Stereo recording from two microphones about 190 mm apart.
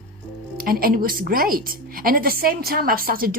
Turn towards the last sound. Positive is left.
turn(degrees=-50)  # may be behind; listen again after turning